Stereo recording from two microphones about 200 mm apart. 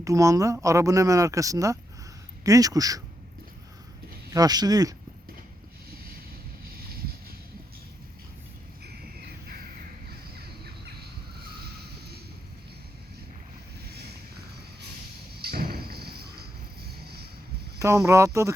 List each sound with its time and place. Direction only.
0.0 s speech: 15° right (ahead or behind)
4.3 s speech: 20° right (ahead or behind)
15.4 s cricket: 50° right (ahead or behind)
17.7 s speech: 15° right (ahead or behind)